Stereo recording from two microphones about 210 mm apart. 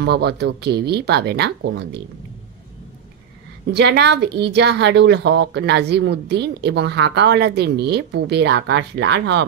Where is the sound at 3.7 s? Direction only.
55° right (ahead or behind).